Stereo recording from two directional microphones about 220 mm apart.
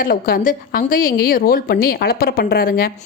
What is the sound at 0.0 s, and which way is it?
A woman's voice, 40° left (ahead or behind).